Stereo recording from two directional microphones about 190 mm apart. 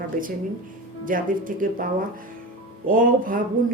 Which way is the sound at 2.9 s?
45° right (ahead or behind).